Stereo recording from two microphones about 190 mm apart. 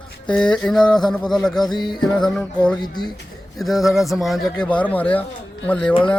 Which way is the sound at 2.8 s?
20° left (ahead or behind).